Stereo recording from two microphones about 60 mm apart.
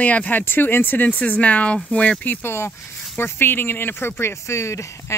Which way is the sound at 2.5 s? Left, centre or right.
Left.